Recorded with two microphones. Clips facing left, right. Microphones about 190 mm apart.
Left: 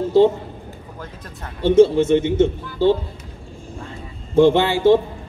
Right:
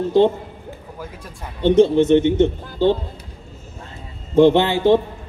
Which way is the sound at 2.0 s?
10° left (ahead or behind).